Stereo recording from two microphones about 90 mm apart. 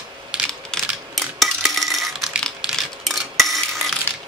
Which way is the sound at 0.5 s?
5° left (ahead or behind).